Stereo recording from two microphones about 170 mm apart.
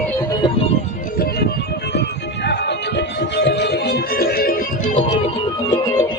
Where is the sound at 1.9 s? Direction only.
85° left; by 5.0 s 55° left (ahead or behind).